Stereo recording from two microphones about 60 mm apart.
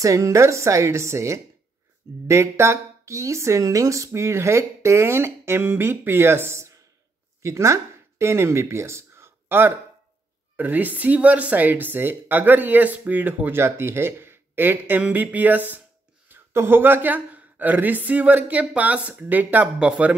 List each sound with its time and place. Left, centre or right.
0.0 s a woman's voice: right
13.6 s speech: right
15.0 s speech: right
16.3 s speech: right